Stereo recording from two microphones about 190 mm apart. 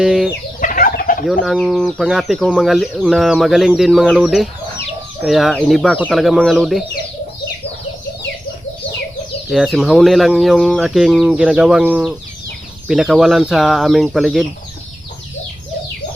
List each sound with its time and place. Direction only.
0.0 s speech: 5° right (ahead or behind)
0.6 s chicken: 45° left (ahead or behind)
1.3 s speech: centre (ahead or behind)
9.5 s speech: centre (ahead or behind)